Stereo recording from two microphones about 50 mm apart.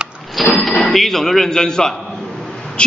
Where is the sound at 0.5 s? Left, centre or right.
Centre.